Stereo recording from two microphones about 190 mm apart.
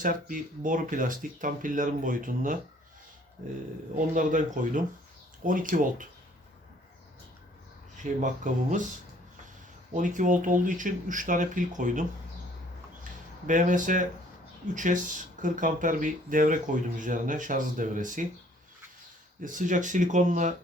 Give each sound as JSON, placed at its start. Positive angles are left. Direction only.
{"t": 0.0, "sound": "speech", "side_deg": -45}
{"t": 3.9, "sound": "speech", "side_deg": -45}
{"t": 8.0, "sound": "speech", "side_deg": -40}
{"t": 9.9, "sound": "speech", "side_deg": -40}
{"t": 13.5, "sound": "speech", "side_deg": -45}
{"t": 19.4, "sound": "speech", "side_deg": -45}